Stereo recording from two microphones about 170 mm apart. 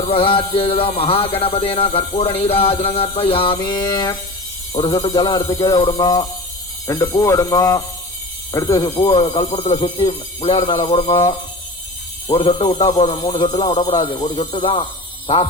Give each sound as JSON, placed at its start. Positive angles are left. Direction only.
{"t": 0.1, "sound": "a man's voice", "side_deg": 30}